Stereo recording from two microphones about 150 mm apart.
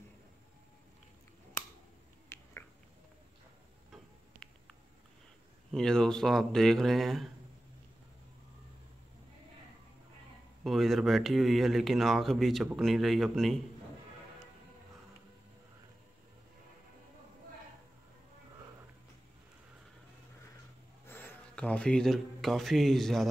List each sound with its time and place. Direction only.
2.2 s finger snapping: 15° left (ahead or behind)
4.4 s a sound: 5° left (ahead or behind)
5.7 s speech: 5° left (ahead or behind)
10.6 s speech: centre (ahead or behind)
21.1 s speech: 15° left (ahead or behind)